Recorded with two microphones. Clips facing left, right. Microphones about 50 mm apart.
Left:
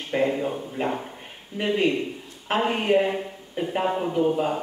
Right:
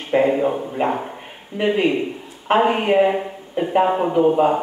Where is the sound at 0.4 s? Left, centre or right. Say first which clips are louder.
Right 7 dB; right.